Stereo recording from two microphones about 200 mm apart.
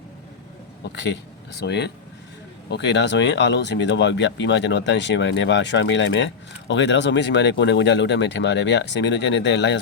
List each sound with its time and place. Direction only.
0.9 s speech: 60° left (ahead or behind)